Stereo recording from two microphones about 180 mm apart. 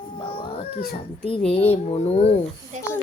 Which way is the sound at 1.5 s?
35° left (ahead or behind).